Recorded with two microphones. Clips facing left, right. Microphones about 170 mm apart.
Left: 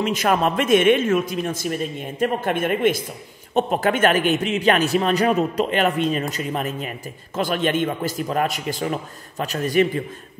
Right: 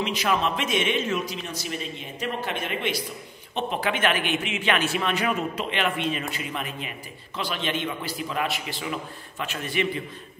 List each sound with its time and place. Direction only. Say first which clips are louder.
0.0 s a man's voice: left 5 dB; 50° left (ahead or behind)